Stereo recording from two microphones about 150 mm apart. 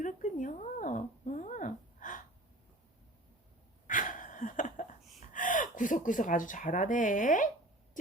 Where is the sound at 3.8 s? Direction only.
60° left (ahead or behind).